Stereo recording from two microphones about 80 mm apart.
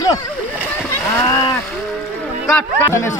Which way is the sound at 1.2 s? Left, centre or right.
Left.